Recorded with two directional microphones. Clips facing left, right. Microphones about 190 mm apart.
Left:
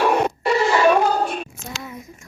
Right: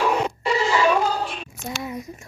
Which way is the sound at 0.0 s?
55° left (ahead or behind).